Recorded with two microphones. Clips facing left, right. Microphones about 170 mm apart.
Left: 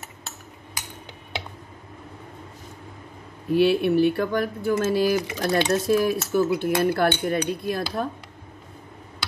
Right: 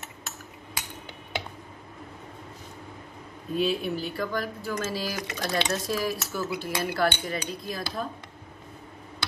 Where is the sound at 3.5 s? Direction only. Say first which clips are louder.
Left 8 dB; 70° left (ahead or behind).